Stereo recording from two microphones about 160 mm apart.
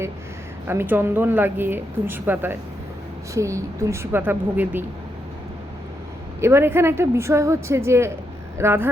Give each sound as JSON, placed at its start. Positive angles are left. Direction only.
{"t": 0.7, "sound": "a woman's voice", "side_deg": -15}
{"t": 6.4, "sound": "a woman's voice", "side_deg": -15}